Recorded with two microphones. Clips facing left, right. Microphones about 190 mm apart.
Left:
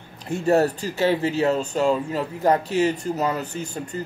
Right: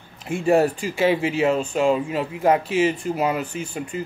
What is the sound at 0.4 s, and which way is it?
Speech, 10° right (ahead or behind).